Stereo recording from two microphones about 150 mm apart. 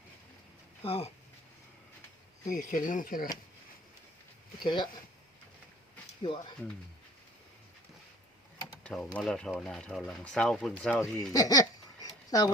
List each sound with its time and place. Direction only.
0.9 s speech: 40° left (ahead or behind)
2.4 s speech: 60° left (ahead or behind)
4.6 s speech: 30° left (ahead or behind)
6.2 s speech: 35° left (ahead or behind)
8.8 s a sound: 5° left (ahead or behind)
9.1 s speech: 5° left (ahead or behind)
11.3 s a sound: 25° left (ahead or behind)